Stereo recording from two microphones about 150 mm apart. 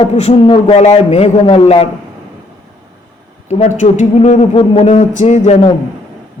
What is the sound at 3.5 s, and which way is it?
Speech, 50° left (ahead or behind).